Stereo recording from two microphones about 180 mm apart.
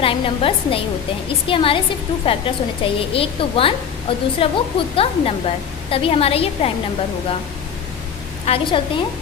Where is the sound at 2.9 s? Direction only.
30° left (ahead or behind).